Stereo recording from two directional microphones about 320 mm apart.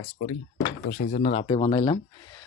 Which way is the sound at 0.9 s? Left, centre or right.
Left.